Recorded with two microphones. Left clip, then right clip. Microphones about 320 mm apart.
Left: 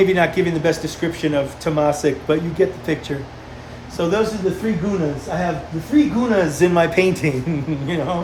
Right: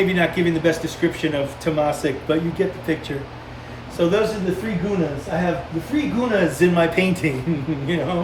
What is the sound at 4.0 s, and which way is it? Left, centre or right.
Speech, centre.